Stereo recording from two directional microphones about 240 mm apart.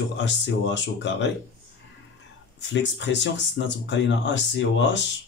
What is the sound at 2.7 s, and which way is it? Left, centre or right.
Speech, left.